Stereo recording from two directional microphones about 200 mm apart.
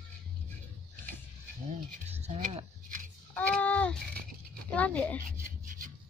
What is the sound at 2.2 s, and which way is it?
Scissors, 30° right (ahead or behind).